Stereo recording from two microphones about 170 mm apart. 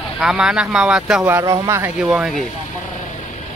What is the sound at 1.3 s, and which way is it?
Speech, 15° right (ahead or behind).